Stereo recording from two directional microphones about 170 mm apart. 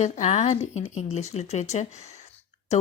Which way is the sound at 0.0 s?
40° left (ahead or behind).